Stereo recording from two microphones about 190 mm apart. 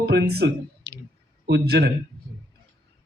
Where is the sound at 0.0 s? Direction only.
60° right (ahead or behind).